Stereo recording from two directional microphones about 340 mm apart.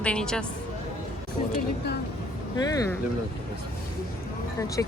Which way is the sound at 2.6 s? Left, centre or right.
Centre.